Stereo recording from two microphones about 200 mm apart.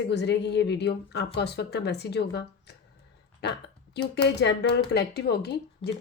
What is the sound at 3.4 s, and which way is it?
Speech, 55° left (ahead or behind).